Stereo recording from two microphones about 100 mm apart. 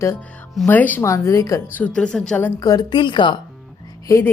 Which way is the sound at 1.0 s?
30° left (ahead or behind).